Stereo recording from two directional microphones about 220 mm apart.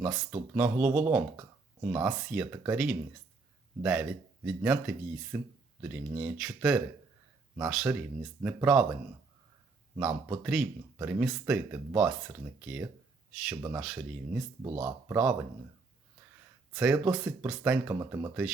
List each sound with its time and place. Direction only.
0.0 s speech: 5° right (ahead or behind)
10.0 s speech: 5° right (ahead or behind); by 14.8 s 20° right (ahead or behind)
14.8 s speech: 10° right (ahead or behind)
16.7 s speech: 5° right (ahead or behind)